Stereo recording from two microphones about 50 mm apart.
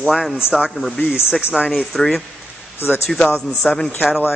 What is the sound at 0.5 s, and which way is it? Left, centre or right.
Speech, centre.